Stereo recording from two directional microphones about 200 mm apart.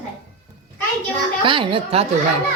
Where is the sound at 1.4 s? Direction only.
25° right (ahead or behind).